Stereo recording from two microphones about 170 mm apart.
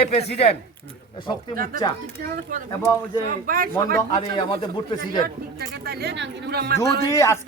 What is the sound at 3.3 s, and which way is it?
Speech, 55° right (ahead or behind).